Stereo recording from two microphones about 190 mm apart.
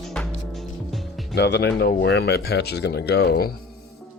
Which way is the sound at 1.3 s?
60° left (ahead or behind).